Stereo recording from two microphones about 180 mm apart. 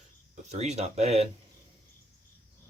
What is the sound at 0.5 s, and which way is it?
Speech, 40° right (ahead or behind).